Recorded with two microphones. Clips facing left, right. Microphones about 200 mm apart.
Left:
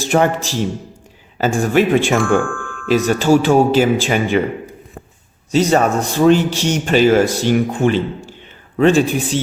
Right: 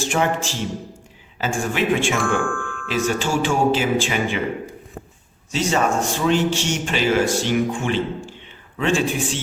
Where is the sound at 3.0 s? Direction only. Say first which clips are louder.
Left 7 dB; 40° left (ahead or behind).